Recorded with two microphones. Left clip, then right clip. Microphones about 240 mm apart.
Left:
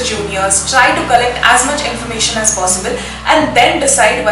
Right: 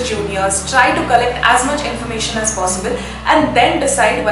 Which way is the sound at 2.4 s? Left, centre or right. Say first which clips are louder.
Left 3 dB; centre.